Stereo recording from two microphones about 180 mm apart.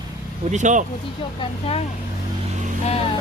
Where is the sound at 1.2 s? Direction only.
30° left (ahead or behind).